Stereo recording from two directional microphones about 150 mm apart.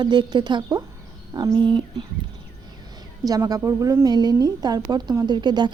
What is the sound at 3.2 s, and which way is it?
Speech, 25° right (ahead or behind).